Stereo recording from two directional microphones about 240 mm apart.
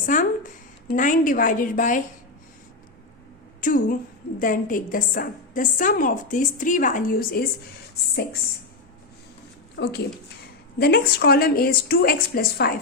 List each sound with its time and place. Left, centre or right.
0.0 s a woman's voice: left
3.6 s a woman's voice: left
9.7 s a woman's voice: left